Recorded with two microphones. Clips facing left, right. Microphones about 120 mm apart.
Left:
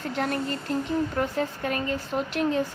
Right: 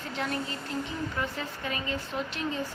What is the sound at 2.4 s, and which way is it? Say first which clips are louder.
Speech: left 10 dB; 60° left (ahead or behind).